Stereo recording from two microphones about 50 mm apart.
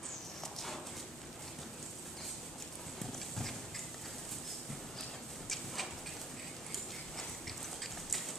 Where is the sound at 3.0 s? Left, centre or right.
Centre.